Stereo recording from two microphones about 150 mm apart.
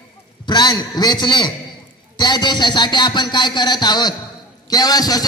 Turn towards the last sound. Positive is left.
turn(degrees=25)  # may be behind; listen again after turning